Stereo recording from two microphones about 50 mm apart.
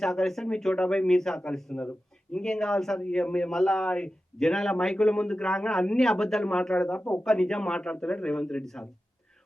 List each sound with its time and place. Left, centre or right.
0.0 s a man's voice: centre
3.8 s speech: left
4.4 s a man's voice: centre
7.0 s speech: left
7.3 s a man's voice: centre